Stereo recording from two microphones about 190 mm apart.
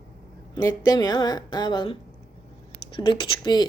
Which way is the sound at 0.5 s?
20° left (ahead or behind).